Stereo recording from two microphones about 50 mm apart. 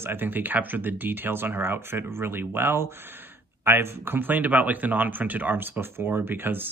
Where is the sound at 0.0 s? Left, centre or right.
Right.